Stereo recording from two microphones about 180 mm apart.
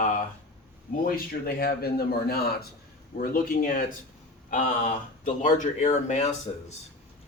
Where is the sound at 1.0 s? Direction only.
55° left (ahead or behind).